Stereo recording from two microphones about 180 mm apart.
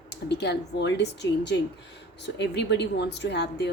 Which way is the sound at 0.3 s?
65° left (ahead or behind).